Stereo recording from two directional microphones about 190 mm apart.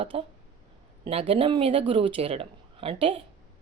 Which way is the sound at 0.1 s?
30° right (ahead or behind).